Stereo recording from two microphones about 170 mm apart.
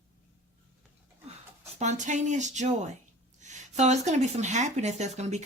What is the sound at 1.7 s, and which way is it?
Speech, 45° right (ahead or behind).